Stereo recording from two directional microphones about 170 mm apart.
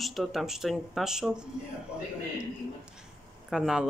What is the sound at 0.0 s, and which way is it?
Speech, centre (ahead or behind).